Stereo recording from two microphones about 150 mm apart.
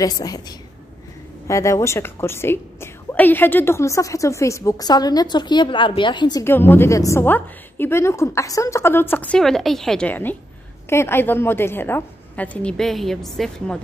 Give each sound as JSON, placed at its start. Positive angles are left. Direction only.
{"t": 0.0, "sound": "a woman's voice", "side_deg": 25}
{"t": 6.4, "sound": "a woman's voice", "side_deg": 15}